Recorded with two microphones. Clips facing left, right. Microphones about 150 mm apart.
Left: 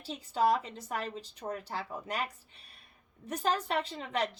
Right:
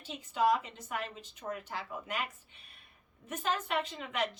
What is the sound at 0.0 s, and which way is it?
A woman's voice, 35° left (ahead or behind).